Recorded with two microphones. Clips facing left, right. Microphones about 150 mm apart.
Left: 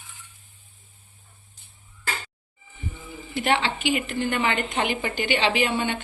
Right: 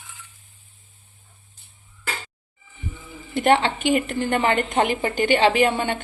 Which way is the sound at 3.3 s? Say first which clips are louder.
Right 5 dB; 45° right (ahead or behind).